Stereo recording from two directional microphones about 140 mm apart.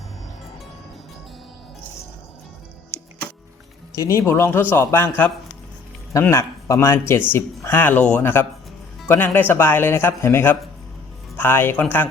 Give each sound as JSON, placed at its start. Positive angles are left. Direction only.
{"t": 3.9, "sound": "speech", "side_deg": 20}